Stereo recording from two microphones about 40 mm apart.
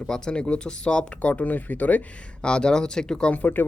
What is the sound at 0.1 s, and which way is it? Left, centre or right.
Speech, left.